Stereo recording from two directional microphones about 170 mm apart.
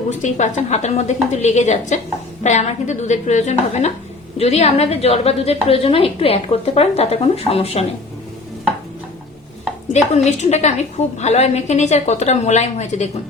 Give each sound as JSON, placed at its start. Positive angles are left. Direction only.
{"t": 0.2, "sound": "a woman's voice", "side_deg": 45}
{"t": 9.9, "sound": "a woman's voice", "side_deg": 40}